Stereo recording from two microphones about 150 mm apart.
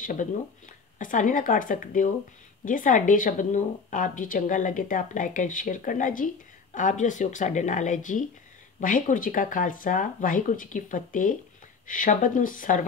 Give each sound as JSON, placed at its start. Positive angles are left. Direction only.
{"t": 0.0, "sound": "a woman's voice", "side_deg": 60}